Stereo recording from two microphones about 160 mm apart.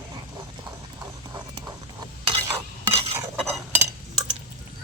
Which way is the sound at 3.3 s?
Centre (ahead or behind).